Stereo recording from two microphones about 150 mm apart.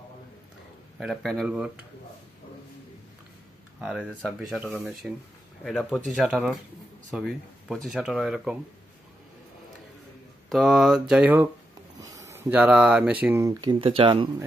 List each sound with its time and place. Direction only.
0.9 s speech: centre (ahead or behind)
3.8 s speech: 5° right (ahead or behind)
10.5 s speech: centre (ahead or behind)
12.0 s speech: 20° right (ahead or behind)